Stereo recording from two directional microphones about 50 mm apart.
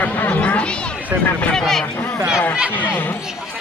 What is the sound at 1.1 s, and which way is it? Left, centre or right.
Speech, right.